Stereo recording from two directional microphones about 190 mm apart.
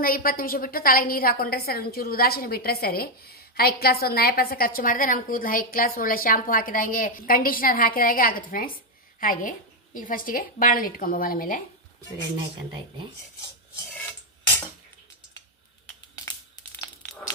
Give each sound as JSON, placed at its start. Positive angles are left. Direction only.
{"t": 0.0, "sound": "a woman's voice", "side_deg": 50}